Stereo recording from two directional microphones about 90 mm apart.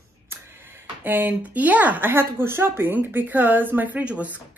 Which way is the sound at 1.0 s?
20° right (ahead or behind).